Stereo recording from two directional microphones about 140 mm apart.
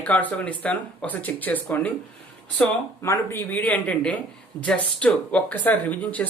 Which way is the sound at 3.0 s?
20° left (ahead or behind).